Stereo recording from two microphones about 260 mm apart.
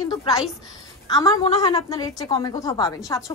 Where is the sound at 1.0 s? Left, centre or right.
Centre.